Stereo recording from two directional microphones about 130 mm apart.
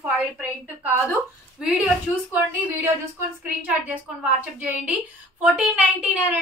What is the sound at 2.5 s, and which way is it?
A woman's voice, 10° right (ahead or behind).